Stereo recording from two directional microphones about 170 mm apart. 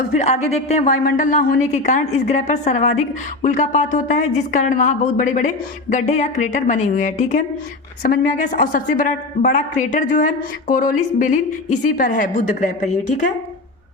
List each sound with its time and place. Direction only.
0.2 s a woman's voice: 40° left (ahead or behind)